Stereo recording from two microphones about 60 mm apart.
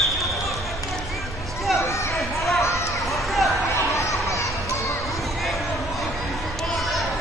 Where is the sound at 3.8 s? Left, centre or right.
Left.